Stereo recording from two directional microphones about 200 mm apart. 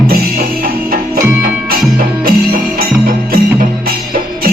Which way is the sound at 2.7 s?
45° right (ahead or behind).